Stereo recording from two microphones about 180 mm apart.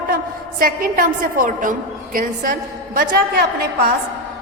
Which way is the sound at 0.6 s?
50° right (ahead or behind).